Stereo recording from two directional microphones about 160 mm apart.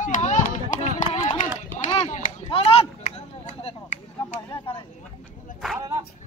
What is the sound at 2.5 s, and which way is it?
Chop, 40° left (ahead or behind).